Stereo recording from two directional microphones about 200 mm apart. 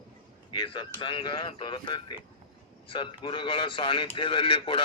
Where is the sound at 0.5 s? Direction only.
25° left (ahead or behind).